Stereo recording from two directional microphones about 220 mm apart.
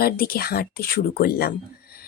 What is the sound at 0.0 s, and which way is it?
Speech, 45° left (ahead or behind).